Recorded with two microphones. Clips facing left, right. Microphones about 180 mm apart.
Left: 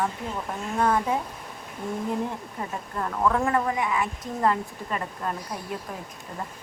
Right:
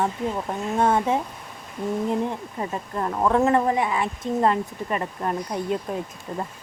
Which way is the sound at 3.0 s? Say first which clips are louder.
Right 4 dB; 30° right (ahead or behind).